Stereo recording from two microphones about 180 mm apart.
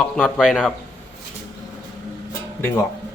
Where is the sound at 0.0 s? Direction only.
5° left (ahead or behind).